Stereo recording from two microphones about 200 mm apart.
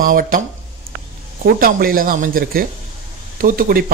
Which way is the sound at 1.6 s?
45° right (ahead or behind).